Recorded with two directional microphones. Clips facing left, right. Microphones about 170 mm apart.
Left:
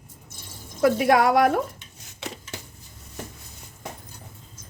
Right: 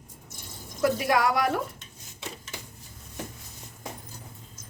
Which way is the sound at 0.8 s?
55° left (ahead or behind).